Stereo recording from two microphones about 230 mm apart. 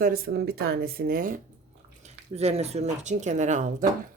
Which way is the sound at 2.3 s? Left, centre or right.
Right.